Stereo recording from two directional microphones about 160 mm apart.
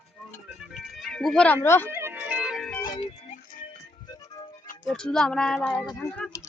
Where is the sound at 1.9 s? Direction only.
15° right (ahead or behind).